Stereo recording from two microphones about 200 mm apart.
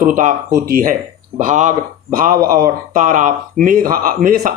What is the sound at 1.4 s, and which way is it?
Speech, 40° right (ahead or behind).